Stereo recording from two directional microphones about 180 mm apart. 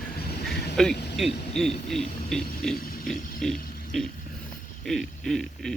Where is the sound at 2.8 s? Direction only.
55° left (ahead or behind).